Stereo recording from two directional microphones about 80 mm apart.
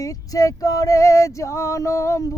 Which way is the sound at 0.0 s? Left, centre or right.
Left.